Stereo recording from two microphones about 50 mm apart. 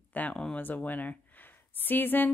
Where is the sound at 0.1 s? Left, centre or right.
Left.